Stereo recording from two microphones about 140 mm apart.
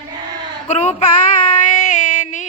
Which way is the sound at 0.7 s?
55° left (ahead or behind).